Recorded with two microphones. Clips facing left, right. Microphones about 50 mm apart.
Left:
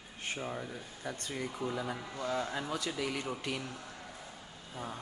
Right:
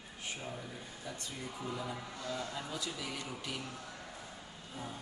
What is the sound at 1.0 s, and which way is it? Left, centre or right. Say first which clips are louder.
Speech: left 7 dB; left.